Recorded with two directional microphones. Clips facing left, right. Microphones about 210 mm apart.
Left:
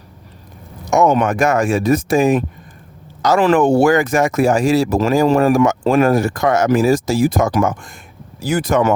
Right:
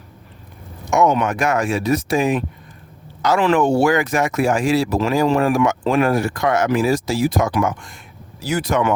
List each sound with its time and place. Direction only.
0.9 s speech: 45° left (ahead or behind)